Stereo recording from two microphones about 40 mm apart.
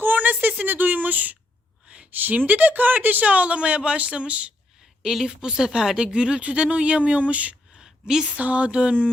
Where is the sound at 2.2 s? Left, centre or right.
Right.